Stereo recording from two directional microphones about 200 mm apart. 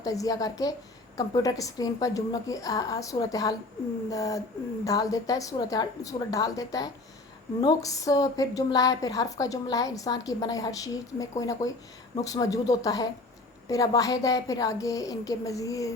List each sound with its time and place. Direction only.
0.0 s a woman's voice: 15° left (ahead or behind)